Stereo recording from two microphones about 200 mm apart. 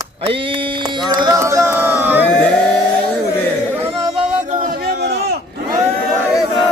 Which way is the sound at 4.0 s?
20° right (ahead or behind).